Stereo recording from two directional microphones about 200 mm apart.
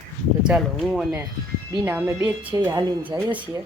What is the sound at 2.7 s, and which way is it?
Speech, 20° right (ahead or behind).